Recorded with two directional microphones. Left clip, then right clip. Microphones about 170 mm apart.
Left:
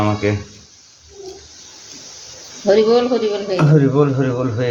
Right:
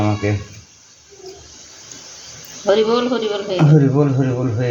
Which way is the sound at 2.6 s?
15° left (ahead or behind).